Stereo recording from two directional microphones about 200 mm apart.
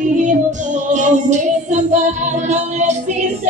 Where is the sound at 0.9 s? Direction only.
35° right (ahead or behind).